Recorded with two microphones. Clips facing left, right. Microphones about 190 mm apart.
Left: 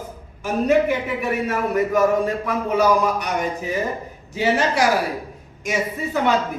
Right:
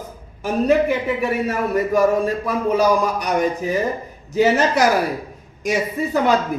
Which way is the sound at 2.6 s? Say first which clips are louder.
Right 1 dB; 35° right (ahead or behind).